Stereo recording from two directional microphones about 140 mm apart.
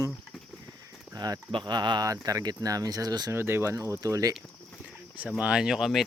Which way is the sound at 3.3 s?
15° right (ahead or behind).